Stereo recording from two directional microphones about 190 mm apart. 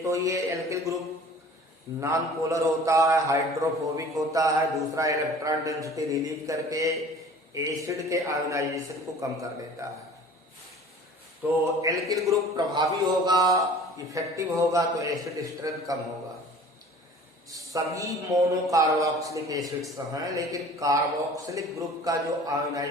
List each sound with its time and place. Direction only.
0.0 s a man's voice: 15° right (ahead or behind)
2.0 s a man's voice: 15° right (ahead or behind)
11.4 s a man's voice: 10° right (ahead or behind)
17.5 s a man's voice: 15° right (ahead or behind)